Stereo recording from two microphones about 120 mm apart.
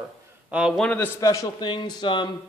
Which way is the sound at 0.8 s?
15° left (ahead or behind).